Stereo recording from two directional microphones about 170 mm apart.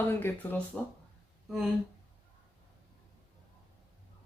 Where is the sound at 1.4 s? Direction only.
Centre (ahead or behind).